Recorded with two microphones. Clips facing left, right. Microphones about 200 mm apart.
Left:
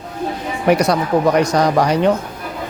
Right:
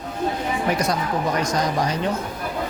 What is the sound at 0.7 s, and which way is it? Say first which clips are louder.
Speech: left 11 dB; 70° left (ahead or behind).